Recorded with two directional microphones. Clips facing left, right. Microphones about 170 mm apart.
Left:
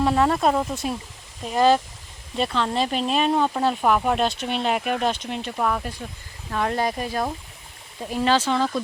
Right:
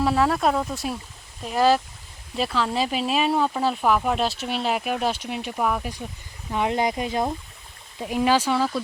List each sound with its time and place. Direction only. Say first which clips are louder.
0.0 s speech: left 1 dB; centre (ahead or behind)